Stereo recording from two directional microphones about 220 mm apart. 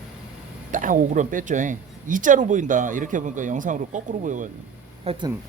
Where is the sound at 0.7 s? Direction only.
35° right (ahead or behind).